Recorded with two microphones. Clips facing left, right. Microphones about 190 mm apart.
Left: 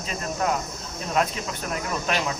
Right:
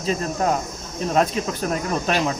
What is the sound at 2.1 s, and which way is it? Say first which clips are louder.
Speech: right 4 dB; 35° right (ahead or behind).